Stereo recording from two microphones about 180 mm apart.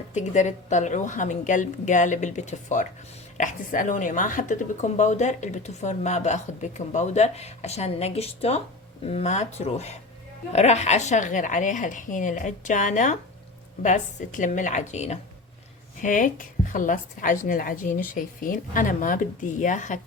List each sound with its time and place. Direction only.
0.1 s a woman's voice: 40° left (ahead or behind)